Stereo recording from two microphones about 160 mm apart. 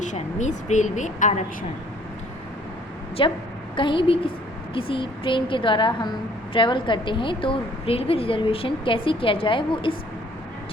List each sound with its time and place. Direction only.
0.0 s a woman's voice: 50° left (ahead or behind)
3.2 s a woman's voice: 30° left (ahead or behind)